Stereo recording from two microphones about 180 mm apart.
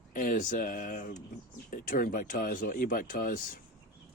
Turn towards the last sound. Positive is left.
turn(degrees=50)  # may be behind; listen again after turning